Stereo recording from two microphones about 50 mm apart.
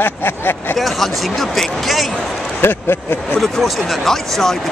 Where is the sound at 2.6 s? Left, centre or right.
Left.